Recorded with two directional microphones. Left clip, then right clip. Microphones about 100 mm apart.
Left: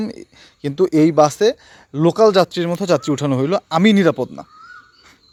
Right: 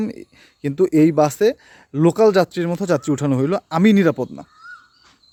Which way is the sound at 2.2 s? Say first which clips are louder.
Left 3 dB; 35° right (ahead or behind).